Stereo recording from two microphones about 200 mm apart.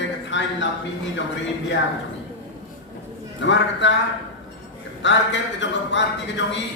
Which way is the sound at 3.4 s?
65° left (ahead or behind).